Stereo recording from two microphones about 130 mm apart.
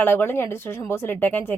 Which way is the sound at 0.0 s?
15° left (ahead or behind).